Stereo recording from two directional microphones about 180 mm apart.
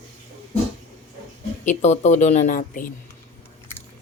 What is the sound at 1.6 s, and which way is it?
A woman's voice, 40° left (ahead or behind).